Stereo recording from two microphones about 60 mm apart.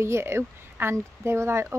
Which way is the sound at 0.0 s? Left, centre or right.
Right.